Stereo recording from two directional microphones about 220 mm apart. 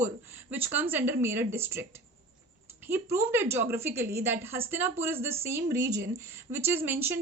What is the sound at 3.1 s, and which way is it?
Speech, 10° right (ahead or behind).